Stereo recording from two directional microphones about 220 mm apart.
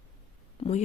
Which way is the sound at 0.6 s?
30° left (ahead or behind).